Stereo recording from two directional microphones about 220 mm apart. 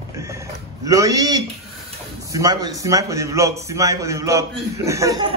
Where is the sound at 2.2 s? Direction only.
15° right (ahead or behind).